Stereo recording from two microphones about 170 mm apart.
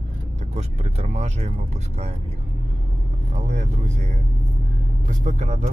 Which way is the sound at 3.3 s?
45° right (ahead or behind).